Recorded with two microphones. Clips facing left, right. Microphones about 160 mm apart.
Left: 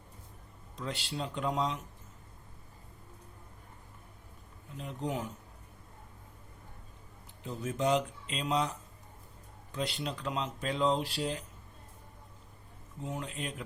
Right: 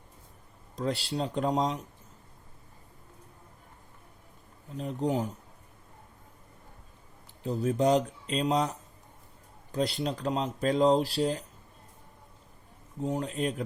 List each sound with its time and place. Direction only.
0.8 s speech: 35° right (ahead or behind)
4.8 s speech: 35° right (ahead or behind)
7.4 s speech: 35° right (ahead or behind)
13.0 s speech: 35° right (ahead or behind)